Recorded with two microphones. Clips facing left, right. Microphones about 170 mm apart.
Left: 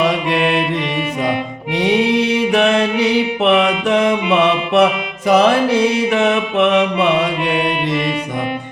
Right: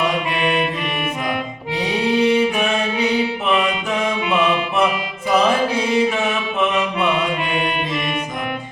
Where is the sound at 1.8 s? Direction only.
90° left.